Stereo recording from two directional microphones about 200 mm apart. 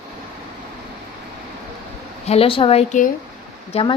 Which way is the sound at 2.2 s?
30° left (ahead or behind).